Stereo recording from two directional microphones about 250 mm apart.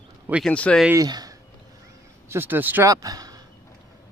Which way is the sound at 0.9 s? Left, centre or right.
Centre.